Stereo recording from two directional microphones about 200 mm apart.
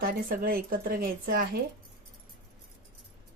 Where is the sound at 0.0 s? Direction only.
45° right (ahead or behind).